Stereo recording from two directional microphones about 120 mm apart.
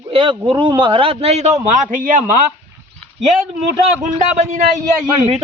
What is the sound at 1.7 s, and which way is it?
Speech, 90° right.